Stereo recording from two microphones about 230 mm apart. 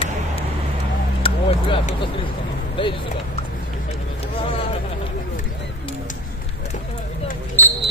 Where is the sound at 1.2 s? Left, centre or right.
Left.